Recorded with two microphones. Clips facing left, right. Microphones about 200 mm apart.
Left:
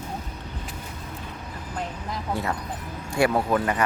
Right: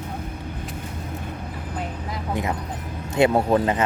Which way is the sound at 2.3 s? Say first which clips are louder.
Right 3 dB; 15° right (ahead or behind).